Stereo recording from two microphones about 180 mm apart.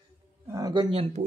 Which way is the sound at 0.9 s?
30° right (ahead or behind).